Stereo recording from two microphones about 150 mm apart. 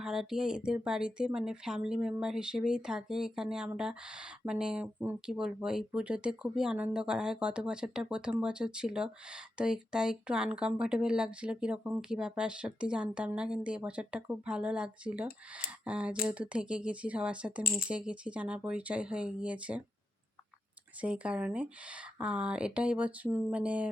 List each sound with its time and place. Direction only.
0.0 s speech: 5° right (ahead or behind)
17.6 s speech: 75° left (ahead or behind)
17.8 s speech: 5° right (ahead or behind)
21.0 s speech: 10° right (ahead or behind)